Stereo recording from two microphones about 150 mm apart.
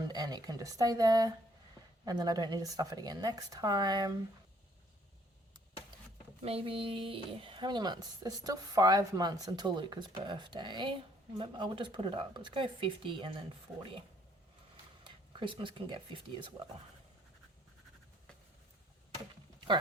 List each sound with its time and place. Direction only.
0.0 s speech: 25° right (ahead or behind)
6.4 s a woman's voice: 40° right (ahead or behind)
15.0 s speech: 35° right (ahead or behind)
19.5 s a sound: 30° right (ahead or behind)